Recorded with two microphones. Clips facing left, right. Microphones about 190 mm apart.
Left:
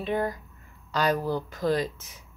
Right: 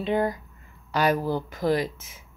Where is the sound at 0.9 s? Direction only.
10° right (ahead or behind).